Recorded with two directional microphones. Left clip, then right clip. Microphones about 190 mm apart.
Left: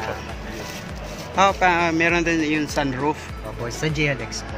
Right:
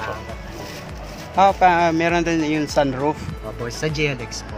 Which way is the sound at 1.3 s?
5° right (ahead or behind).